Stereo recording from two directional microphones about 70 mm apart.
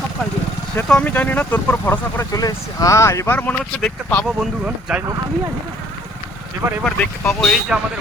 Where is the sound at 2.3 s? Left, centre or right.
Left.